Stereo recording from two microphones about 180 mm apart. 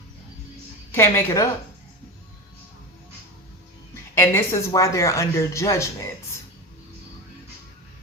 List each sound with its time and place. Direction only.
0.9 s a woman's voice: 15° left (ahead or behind)
4.2 s a woman's voice: 15° left (ahead or behind)